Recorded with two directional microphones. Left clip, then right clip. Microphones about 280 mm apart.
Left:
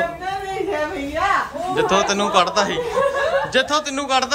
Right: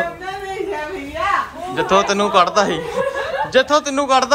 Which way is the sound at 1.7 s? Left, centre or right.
Centre.